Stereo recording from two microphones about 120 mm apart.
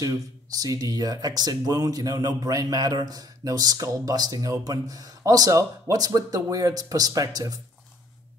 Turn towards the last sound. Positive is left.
turn(degrees=-30)  # may be behind; listen again after turning